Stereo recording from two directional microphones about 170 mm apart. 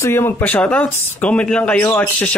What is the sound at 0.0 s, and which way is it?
Speech, 15° left (ahead or behind).